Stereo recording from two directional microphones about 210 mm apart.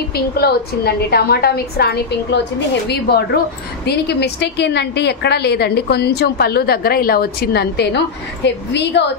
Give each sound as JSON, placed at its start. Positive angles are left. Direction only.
{"t": 0.1, "sound": "a woman's voice", "side_deg": 50}